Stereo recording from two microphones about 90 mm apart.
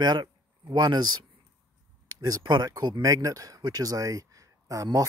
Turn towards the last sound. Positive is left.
turn(degrees=-40)  # may be behind; listen again after turning